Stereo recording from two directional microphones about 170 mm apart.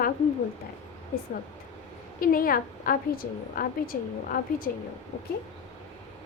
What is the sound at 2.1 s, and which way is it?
A woman's voice, 55° left (ahead or behind).